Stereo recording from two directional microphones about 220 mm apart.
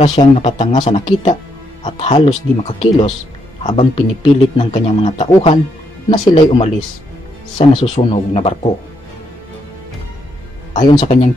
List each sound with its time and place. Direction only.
0.0 s speech: 30° left (ahead or behind)
2.1 s speech: 25° left (ahead or behind)
10.8 s speech: 20° left (ahead or behind)